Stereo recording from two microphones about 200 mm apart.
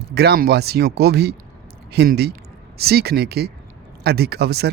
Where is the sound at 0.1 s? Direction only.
55° right (ahead or behind).